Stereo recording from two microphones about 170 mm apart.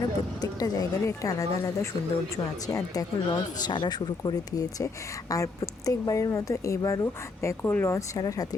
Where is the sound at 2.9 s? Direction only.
25° left (ahead or behind).